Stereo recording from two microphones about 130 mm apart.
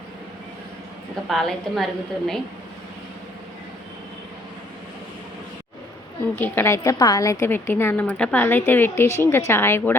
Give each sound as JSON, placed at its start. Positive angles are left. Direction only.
{"t": 1.3, "sound": "a woman's voice", "side_deg": 0}
{"t": 6.4, "sound": "a woman's voice", "side_deg": 20}